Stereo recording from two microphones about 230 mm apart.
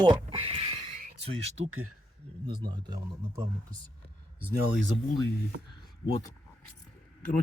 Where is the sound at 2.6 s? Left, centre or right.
Centre.